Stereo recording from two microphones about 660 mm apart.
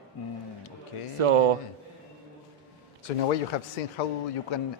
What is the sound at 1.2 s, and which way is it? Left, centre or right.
Speech, right.